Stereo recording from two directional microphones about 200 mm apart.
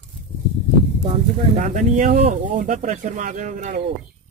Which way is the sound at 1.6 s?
40° right (ahead or behind).